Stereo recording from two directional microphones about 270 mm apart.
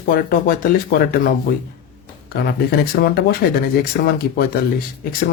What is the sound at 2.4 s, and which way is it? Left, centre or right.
Speech, left.